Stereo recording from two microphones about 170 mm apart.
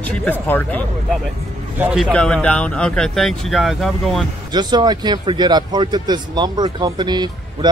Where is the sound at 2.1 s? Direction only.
5° left (ahead or behind).